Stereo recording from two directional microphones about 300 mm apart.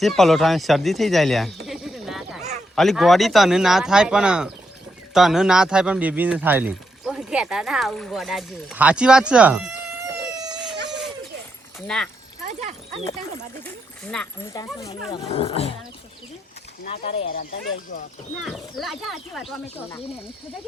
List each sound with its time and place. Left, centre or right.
0.0 s speech: centre
12.5 s speech: right
13.7 s speech: centre
16.8 s speech: left
18.4 s speech: centre